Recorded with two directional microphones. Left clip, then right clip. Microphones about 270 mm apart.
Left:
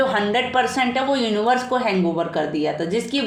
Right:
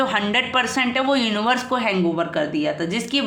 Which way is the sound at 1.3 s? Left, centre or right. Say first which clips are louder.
Left 2 dB; right.